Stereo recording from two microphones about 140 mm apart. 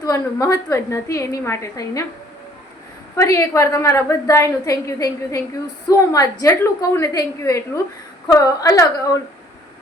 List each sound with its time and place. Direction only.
0.0 s a woman's voice: 20° left (ahead or behind)
3.2 s a woman's voice: 20° left (ahead or behind)